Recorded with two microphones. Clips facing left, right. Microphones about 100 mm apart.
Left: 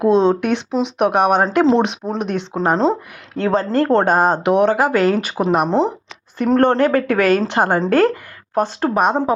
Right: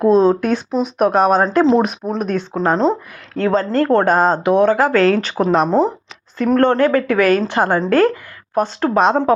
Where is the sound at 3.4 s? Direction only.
20° left (ahead or behind).